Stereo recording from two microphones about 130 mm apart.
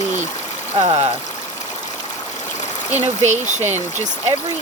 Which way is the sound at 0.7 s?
45° right (ahead or behind).